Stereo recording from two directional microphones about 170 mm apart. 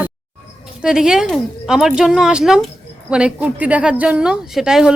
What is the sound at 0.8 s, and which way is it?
A woman's voice, 5° right (ahead or behind).